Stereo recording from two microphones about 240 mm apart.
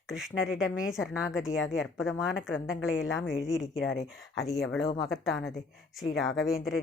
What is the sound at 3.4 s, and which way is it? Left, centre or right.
Speech, left.